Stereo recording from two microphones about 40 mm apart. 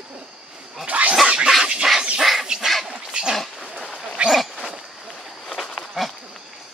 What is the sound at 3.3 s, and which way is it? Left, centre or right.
Dog, centre.